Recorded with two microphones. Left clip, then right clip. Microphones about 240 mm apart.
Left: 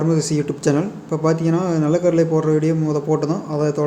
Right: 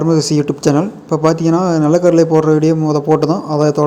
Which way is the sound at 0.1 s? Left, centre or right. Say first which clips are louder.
Right 6 dB; centre.